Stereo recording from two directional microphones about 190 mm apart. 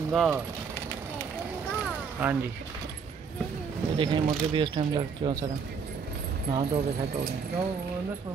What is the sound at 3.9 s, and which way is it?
Speech, 25° right (ahead or behind).